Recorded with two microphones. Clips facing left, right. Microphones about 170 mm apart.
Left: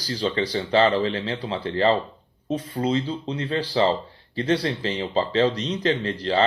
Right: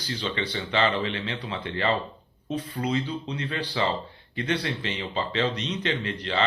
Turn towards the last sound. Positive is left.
turn(degrees=30)  # may be behind; listen again after turning